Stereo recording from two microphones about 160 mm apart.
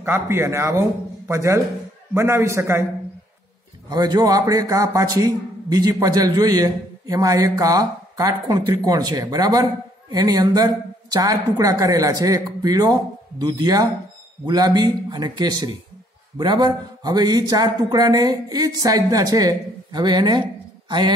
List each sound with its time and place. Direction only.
0.0 s a man's voice: 15° right (ahead or behind)
3.9 s a man's voice: 25° right (ahead or behind)